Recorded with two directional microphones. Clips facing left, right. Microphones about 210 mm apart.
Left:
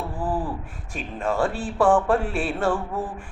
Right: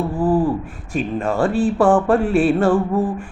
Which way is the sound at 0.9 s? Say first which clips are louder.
Right 5 dB; centre (ahead or behind).